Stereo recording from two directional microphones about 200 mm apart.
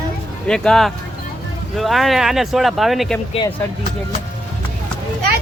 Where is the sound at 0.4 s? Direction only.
5° left (ahead or behind).